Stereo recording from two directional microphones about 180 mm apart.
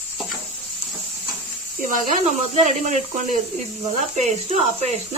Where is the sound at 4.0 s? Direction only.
40° right (ahead or behind).